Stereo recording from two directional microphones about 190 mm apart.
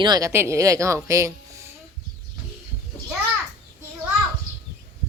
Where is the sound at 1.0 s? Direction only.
15° right (ahead or behind).